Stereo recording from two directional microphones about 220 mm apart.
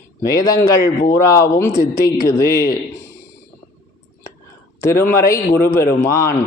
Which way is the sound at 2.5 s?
45° left (ahead or behind).